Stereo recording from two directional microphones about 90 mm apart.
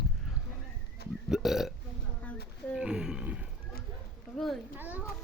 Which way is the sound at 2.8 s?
10° right (ahead or behind).